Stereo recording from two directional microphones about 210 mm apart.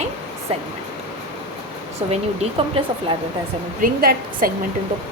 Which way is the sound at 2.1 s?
30° right (ahead or behind).